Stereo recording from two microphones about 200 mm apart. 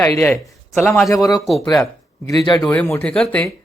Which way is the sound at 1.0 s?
15° left (ahead or behind).